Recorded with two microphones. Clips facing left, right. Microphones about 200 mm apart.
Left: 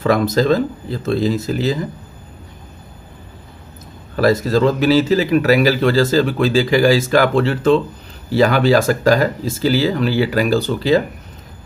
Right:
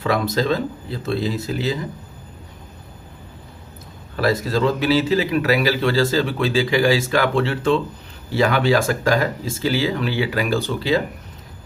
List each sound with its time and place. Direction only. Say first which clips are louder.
0.0 s speech: left 5 dB; 45° left (ahead or behind)
4.2 s speech: left 5 dB; 45° left (ahead or behind)